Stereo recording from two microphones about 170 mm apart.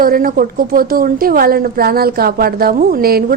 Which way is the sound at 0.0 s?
60° right (ahead or behind).